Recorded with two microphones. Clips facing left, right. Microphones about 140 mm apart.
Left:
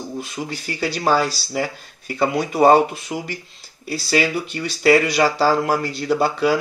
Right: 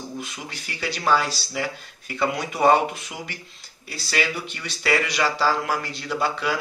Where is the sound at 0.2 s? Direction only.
40° left (ahead or behind).